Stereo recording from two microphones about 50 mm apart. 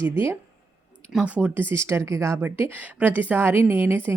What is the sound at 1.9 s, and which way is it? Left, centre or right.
Speech, right.